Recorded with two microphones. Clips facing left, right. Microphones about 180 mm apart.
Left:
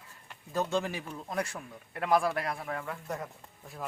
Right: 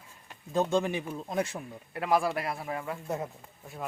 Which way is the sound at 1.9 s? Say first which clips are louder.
Even; 5° right (ahead or behind).